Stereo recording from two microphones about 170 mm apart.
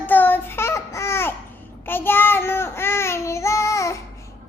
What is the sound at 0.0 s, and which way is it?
Child singing, 10° left (ahead or behind).